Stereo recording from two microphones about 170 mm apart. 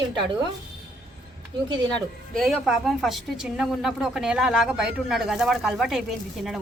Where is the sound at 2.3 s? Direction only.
Centre (ahead or behind).